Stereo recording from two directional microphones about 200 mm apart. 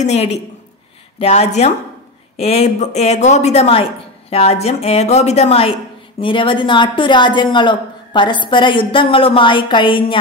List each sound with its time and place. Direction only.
0.0 s a woman's voice: 35° left (ahead or behind)